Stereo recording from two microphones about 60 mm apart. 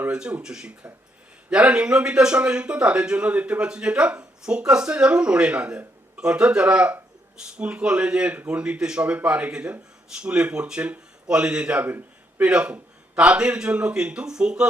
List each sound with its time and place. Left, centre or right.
0.1 s a man's voice: centre
11.8 s speech: right
12.4 s a man's voice: centre